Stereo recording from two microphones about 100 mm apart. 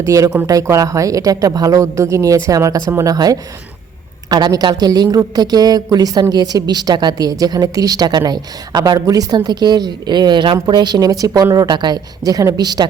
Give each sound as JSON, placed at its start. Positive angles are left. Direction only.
{"t": 0.0, "sound": "a woman's voice", "side_deg": -35}